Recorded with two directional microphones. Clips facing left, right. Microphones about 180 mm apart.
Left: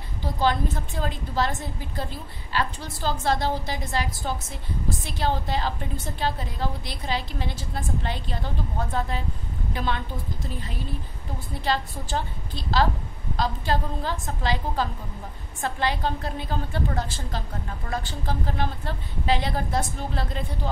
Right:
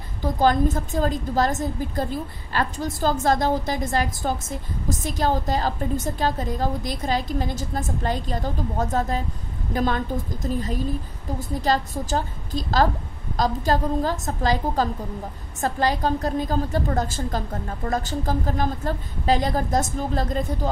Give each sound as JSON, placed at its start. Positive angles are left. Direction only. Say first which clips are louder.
{"t": 0.2, "sound": "a woman's voice", "louder": "right 5 dB", "side_deg": -45}